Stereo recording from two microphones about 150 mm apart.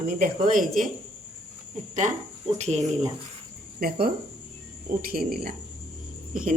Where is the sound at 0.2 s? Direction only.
65° right (ahead or behind).